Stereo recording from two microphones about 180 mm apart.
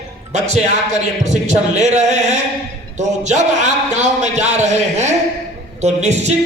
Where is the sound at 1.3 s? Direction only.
40° right (ahead or behind).